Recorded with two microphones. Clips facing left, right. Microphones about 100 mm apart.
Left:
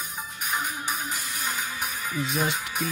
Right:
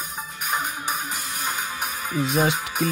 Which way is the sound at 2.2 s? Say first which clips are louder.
Right 6 dB; 70° right (ahead or behind).